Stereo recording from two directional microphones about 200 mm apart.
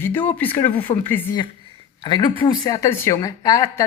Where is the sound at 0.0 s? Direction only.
10° left (ahead or behind).